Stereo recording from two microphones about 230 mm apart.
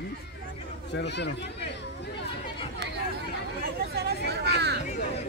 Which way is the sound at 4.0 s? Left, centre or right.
Right.